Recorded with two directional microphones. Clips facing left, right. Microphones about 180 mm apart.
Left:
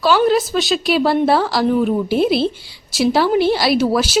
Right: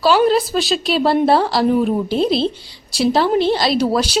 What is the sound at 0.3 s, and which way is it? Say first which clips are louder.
A woman's voice: even; centre (ahead or behind).